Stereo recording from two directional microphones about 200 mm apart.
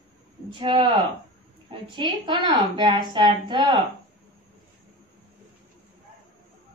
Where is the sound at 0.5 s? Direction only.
25° right (ahead or behind).